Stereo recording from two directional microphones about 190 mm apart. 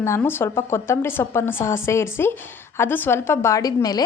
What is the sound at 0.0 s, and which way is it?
A woman's voice, 15° left (ahead or behind).